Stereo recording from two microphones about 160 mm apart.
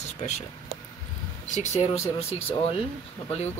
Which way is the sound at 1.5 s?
45° left (ahead or behind).